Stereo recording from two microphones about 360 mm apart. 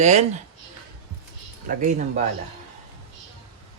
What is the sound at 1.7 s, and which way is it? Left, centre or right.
Speech, right.